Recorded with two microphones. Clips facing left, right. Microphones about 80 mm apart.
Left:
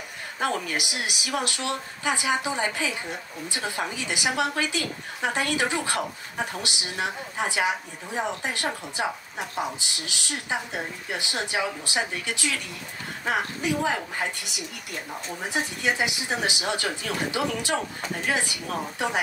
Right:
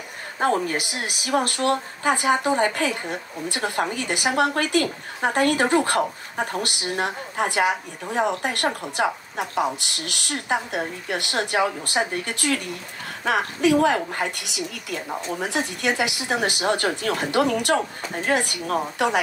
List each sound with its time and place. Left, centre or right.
0.4 s speech: right
9.8 s speech: right
13.2 s a woman's voice: right
17.7 s speech: right
19.0 s a woman's voice: right